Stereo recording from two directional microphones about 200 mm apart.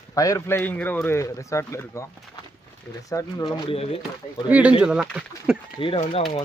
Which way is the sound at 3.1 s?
20° left (ahead or behind).